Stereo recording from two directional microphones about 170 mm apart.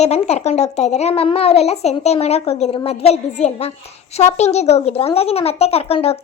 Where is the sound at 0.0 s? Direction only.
40° left (ahead or behind).